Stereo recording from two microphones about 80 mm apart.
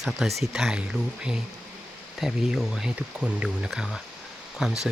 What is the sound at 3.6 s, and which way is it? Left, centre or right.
Speech, centre.